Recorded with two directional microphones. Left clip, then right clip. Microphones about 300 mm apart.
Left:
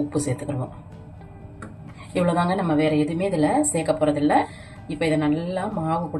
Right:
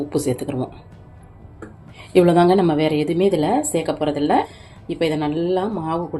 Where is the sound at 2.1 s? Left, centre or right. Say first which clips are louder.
Right 8 dB; right.